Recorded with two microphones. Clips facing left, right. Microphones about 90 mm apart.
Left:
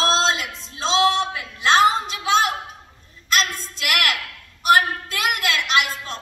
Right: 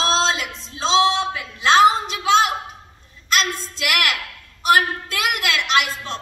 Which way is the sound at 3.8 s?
40° left (ahead or behind).